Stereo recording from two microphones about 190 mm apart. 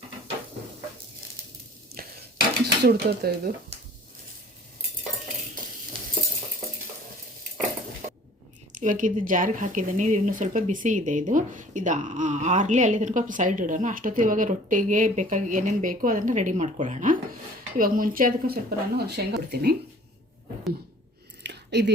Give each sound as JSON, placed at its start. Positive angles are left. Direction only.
{"t": 1.9, "sound": "stir", "side_deg": -55}
{"t": 2.8, "sound": "speech", "side_deg": -55}
{"t": 8.7, "sound": "speech", "side_deg": -45}
{"t": 21.4, "sound": "a sound", "side_deg": -65}